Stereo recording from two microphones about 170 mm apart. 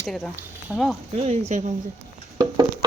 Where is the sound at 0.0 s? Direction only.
Centre (ahead or behind).